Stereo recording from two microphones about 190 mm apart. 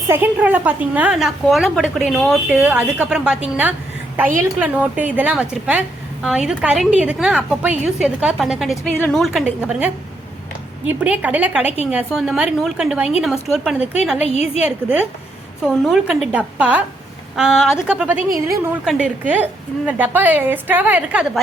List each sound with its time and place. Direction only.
0.1 s a woman's voice: 10° right (ahead or behind)
11.0 s a woman's voice: 10° right (ahead or behind)
14.3 s a woman's voice: 35° left (ahead or behind)
14.6 s a woman's voice: 5° right (ahead or behind)